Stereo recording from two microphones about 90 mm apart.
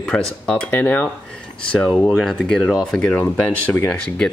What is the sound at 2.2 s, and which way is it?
Speech, 5° left (ahead or behind).